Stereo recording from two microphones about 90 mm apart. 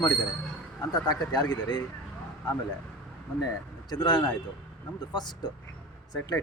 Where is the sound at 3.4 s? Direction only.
50° left (ahead or behind).